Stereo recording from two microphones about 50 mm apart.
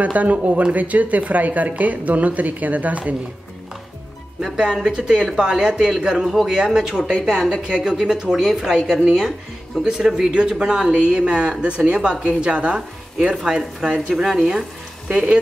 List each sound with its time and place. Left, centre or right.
0.0 s speech: right
4.8 s a woman's voice: centre
14.1 s a woman's voice: centre
15.0 s speech: right